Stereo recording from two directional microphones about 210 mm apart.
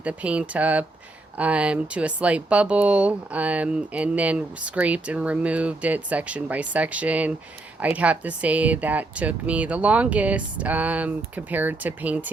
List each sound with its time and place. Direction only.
0.0 s speech: 5° right (ahead or behind)